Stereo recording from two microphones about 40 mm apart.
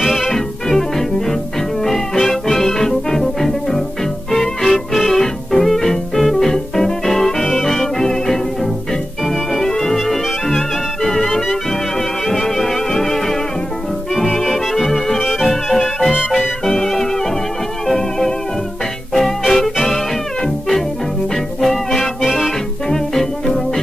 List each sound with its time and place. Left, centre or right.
0.0 s music: centre
15.1 s music: centre
15.4 s music: centre
22.2 s music: centre
22.8 s music: centre